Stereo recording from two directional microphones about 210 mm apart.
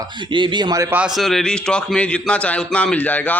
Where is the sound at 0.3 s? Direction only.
25° right (ahead or behind).